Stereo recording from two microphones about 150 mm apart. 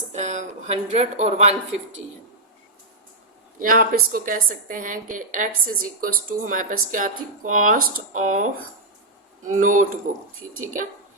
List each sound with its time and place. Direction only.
0.1 s speech: 50° right (ahead or behind)
3.6 s a woman's voice: 70° right (ahead or behind)